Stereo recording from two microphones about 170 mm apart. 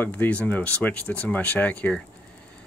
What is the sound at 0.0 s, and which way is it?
Speech, 10° left (ahead or behind).